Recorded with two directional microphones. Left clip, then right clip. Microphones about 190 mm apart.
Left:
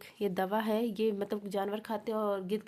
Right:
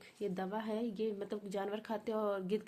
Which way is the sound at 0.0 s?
35° left (ahead or behind).